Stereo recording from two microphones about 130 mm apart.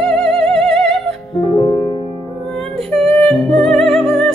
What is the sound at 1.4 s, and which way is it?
Music, 25° left (ahead or behind).